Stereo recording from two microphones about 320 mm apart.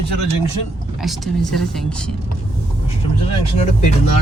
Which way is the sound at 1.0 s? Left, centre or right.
Centre.